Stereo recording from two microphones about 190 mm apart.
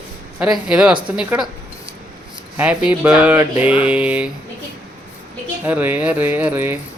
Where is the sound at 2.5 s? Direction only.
5° right (ahead or behind).